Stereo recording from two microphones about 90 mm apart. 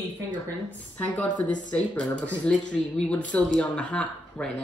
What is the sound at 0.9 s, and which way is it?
A woman's voice, 20° left (ahead or behind).